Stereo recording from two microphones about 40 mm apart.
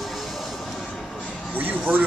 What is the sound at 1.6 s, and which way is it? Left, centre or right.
Speech, right.